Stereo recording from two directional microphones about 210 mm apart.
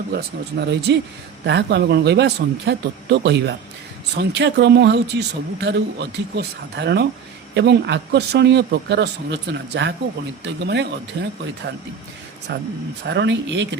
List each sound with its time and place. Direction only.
0.1 s speech: 50° right (ahead or behind)